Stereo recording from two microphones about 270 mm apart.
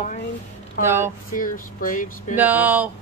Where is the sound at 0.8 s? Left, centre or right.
Centre.